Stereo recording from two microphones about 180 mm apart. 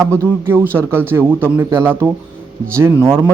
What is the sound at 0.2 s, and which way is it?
Speech, 10° right (ahead or behind).